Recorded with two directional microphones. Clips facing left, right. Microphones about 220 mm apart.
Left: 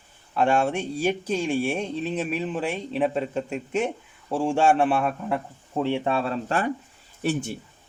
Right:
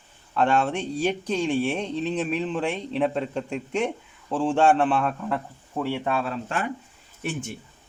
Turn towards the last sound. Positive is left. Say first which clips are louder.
# left 5 dB
turn(degrees=35)  # may be behind; listen again after turning